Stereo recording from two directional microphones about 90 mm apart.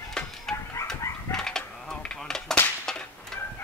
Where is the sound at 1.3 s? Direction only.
5° left (ahead or behind).